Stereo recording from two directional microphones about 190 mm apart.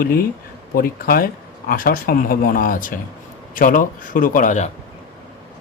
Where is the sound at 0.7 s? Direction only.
50° left (ahead or behind).